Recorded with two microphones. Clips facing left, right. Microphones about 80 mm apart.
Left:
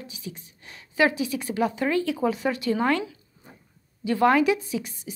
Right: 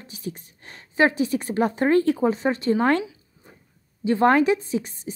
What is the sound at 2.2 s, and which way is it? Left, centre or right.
Speech, right.